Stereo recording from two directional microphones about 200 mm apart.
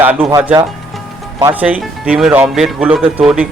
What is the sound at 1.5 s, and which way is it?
Speech, 5° right (ahead or behind).